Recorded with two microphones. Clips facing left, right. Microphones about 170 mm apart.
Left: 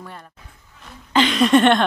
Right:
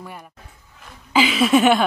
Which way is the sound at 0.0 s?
10° right (ahead or behind).